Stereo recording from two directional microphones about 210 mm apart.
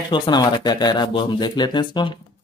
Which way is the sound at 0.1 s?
20° left (ahead or behind).